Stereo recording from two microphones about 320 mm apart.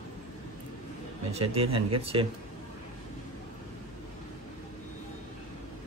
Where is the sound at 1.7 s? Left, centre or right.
Right.